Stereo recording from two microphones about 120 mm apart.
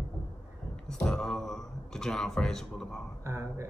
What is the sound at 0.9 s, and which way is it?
Speech, 5° left (ahead or behind).